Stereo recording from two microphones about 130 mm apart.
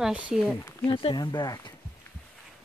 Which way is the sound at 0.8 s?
40° left (ahead or behind).